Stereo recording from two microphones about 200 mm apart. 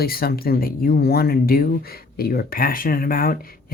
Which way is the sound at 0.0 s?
50° left (ahead or behind).